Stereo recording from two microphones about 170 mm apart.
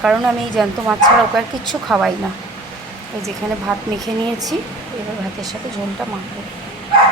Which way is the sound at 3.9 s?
20° right (ahead or behind).